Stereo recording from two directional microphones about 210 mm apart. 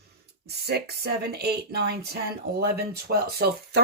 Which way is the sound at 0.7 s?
50° right (ahead or behind).